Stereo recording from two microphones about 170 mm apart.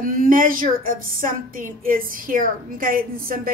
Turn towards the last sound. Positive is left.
turn(degrees=-55)  # may be behind; listen again after turning